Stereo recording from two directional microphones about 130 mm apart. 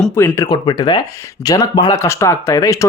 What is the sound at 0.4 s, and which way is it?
Speech, 35° left (ahead or behind).